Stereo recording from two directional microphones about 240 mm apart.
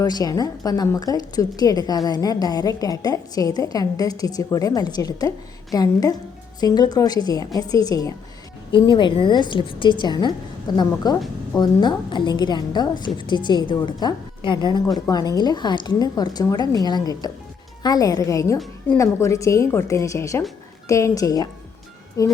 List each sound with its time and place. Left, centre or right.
0.0 s a woman's voice: centre